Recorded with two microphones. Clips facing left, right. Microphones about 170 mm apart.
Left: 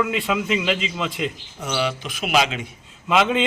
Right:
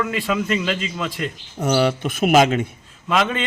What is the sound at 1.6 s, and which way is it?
A man's voice, 50° right (ahead or behind).